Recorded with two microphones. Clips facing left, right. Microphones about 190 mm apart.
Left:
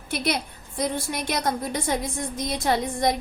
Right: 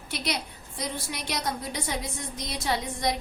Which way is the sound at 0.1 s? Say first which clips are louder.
Left 6 dB; 50° left (ahead or behind).